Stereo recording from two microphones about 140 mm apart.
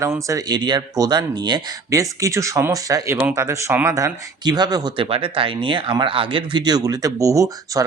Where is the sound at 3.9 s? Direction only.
25° right (ahead or behind).